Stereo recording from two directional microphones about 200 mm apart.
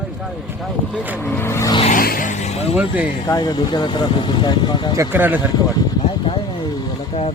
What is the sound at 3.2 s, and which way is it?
Speech, 20° left (ahead or behind).